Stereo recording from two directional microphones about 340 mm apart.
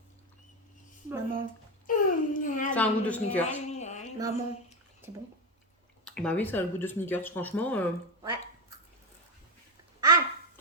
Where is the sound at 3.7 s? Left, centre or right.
Centre.